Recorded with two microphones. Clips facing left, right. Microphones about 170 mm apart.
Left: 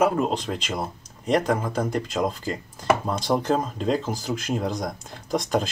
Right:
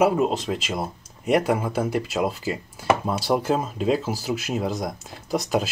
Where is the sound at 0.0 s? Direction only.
5° right (ahead or behind).